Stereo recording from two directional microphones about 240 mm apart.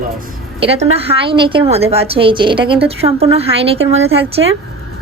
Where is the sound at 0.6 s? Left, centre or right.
Right.